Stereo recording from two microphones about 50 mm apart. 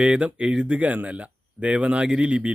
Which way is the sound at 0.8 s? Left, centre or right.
Right.